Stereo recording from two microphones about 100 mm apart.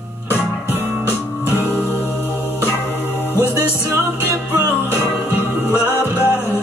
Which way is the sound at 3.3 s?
25° left (ahead or behind).